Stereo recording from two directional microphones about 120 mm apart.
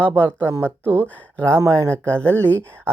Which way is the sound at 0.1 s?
20° right (ahead or behind).